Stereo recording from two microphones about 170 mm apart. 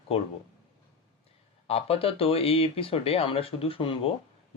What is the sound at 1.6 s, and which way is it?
Speech, 35° left (ahead or behind).